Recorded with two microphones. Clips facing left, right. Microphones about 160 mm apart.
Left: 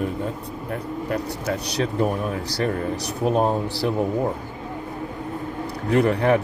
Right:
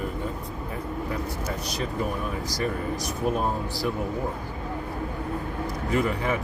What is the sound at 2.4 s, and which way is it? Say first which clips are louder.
Speech: left 3 dB; 70° left (ahead or behind).